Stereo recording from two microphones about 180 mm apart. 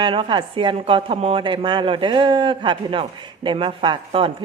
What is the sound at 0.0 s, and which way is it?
Speech, 25° right (ahead or behind).